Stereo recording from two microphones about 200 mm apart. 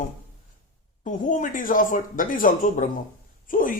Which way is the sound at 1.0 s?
40° left (ahead or behind).